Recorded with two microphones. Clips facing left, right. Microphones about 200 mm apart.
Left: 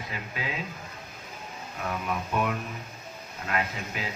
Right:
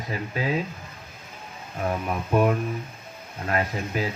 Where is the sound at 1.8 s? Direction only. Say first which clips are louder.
Right 4 dB; 40° right (ahead or behind).